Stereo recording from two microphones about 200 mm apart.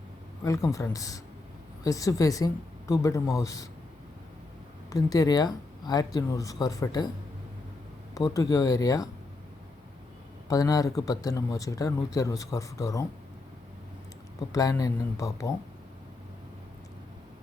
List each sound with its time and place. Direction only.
0.4 s speech: 15° left (ahead or behind)
4.9 s speech: 20° left (ahead or behind)
8.1 s speech: 15° left (ahead or behind)
10.5 s speech: 20° left (ahead or behind)
14.5 s speech: 15° left (ahead or behind)